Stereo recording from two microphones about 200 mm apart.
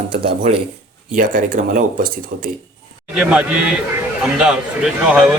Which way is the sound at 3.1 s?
5° right (ahead or behind).